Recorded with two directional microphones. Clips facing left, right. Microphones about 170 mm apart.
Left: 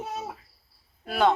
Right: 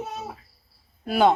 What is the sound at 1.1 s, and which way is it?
Speech, 5° right (ahead or behind).